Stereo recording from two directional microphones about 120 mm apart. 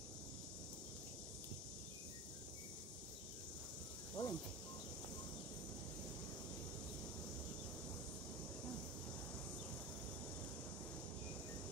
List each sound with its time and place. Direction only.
4.2 s snake: 35° left (ahead or behind)